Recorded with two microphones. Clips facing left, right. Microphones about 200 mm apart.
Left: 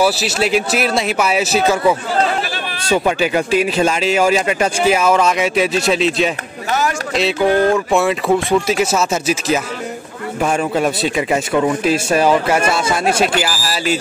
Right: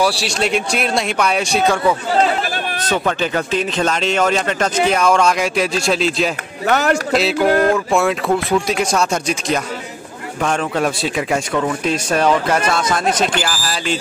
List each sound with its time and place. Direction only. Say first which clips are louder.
0.0 s speech: left 2 dB; 5° left (ahead or behind)
6.7 s speech: right 3 dB; 65° right (ahead or behind)
7.2 s speech: left 3 dB; centre (ahead or behind)